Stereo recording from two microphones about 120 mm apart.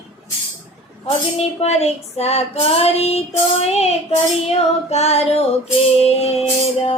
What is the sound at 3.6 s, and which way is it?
Child singing, 60° left (ahead or behind).